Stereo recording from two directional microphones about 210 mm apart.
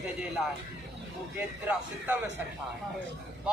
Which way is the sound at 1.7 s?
10° right (ahead or behind).